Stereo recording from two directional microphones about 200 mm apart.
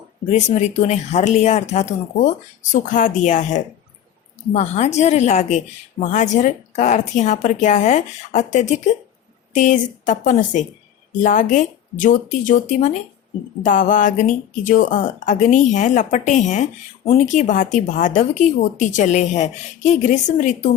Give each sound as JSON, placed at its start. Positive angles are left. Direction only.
{"t": 0.3, "sound": "speech", "side_deg": 35}